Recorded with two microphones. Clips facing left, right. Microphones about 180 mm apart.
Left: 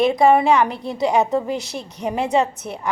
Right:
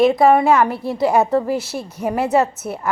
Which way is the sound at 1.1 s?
15° left (ahead or behind).